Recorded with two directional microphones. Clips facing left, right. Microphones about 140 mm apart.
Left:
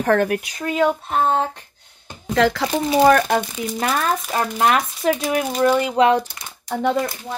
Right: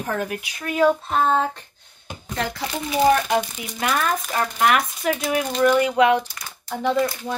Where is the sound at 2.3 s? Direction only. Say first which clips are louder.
Left 9 dB; 90° left.